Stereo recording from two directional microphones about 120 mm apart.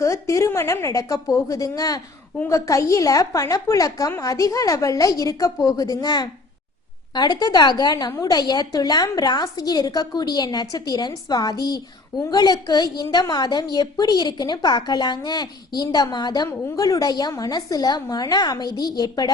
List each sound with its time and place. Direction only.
0.0 s a woman's voice: 25° left (ahead or behind)